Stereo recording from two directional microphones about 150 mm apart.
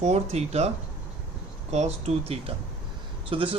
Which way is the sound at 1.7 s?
45° right (ahead or behind).